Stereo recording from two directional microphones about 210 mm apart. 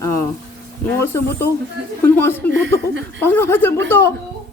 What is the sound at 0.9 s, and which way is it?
Speech, 10° left (ahead or behind).